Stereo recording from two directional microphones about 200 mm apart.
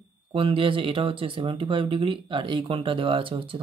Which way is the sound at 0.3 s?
25° right (ahead or behind).